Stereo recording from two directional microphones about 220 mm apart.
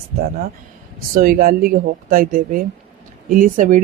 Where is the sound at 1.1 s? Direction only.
40° right (ahead or behind).